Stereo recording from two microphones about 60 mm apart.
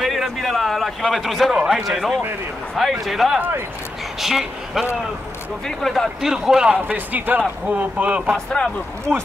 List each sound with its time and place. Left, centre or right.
0.0 s a man's voice: centre
3.3 s speech: right
4.2 s a man's voice: centre
6.2 s a man's voice: centre
6.9 s speech: right
8.3 s speech: centre